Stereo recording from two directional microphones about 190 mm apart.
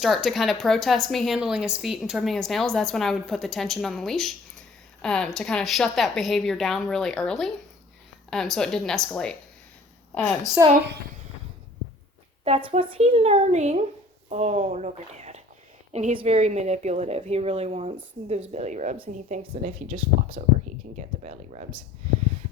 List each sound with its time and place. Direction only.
0.0 s a woman's voice: centre (ahead or behind)
12.5 s speech: 30° right (ahead or behind)